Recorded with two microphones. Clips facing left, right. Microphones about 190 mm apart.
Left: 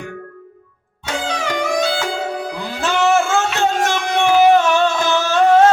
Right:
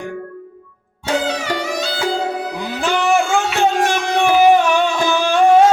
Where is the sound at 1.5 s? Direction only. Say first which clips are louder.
Left 4 dB; 55° left (ahead or behind).